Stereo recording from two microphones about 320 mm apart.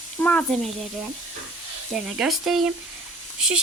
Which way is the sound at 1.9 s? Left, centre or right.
Centre.